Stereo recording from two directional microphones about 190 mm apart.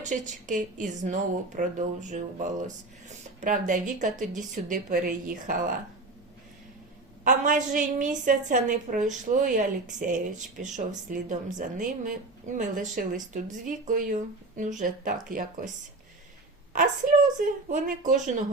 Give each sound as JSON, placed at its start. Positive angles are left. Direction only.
{"t": 0.0, "sound": "a woman's voice", "side_deg": -40}
{"t": 7.3, "sound": "a woman's voice", "side_deg": -45}
{"t": 17.4, "sound": "speech", "side_deg": -45}